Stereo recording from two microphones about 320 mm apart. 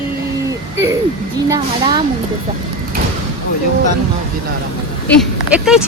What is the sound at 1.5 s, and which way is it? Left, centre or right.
Speech, centre.